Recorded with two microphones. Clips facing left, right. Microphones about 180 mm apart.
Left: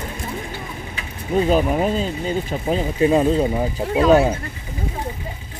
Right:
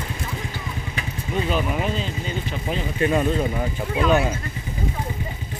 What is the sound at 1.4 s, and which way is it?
Speech, 40° left (ahead or behind).